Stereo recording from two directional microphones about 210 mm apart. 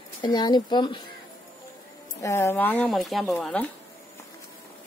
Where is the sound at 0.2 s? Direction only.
20° left (ahead or behind).